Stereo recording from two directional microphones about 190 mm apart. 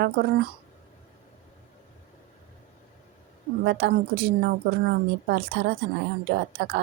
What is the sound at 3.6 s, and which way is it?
A woman's voice, 60° right (ahead or behind).